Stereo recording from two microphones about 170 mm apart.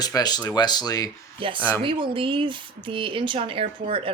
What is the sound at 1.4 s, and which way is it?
Speech, 30° right (ahead or behind).